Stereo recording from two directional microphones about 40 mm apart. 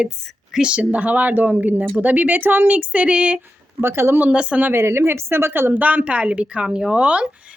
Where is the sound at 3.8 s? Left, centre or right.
Right.